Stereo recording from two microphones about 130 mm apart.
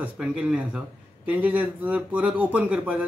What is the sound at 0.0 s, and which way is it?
Speech, 10° right (ahead or behind).